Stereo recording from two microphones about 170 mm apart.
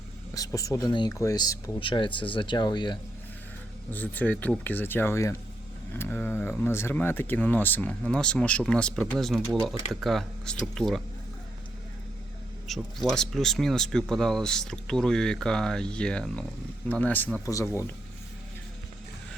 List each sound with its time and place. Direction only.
0.3 s speech: 20° left (ahead or behind)
3.9 s speech: 10° left (ahead or behind)
12.6 s speech: centre (ahead or behind); by 17.8 s 15° left (ahead or behind)